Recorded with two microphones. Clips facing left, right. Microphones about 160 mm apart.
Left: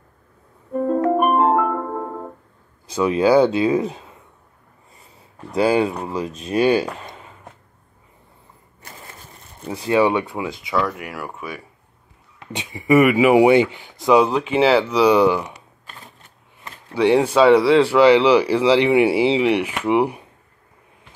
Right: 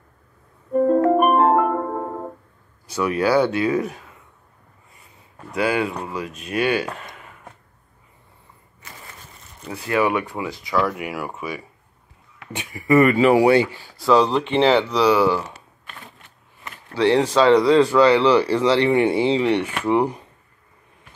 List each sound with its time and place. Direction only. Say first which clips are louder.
0.7 s music: right 2 dB; centre (ahead or behind)
3.0 s speech: left 4 dB; 20° left (ahead or behind)
5.5 s speech: left 4 dB; 30° left (ahead or behind)
7.0 s a sound: left 2 dB; 25° left (ahead or behind)
9.6 s speech: left 4 dB; 20° left (ahead or behind)
10.7 s speech: right 2 dB; 5° right (ahead or behind)
12.4 s speech: left 2 dB; 25° left (ahead or behind)
14.3 s speech: left 1 dB; 5° left (ahead or behind)
16.9 s speech: left 2 dB; 10° left (ahead or behind)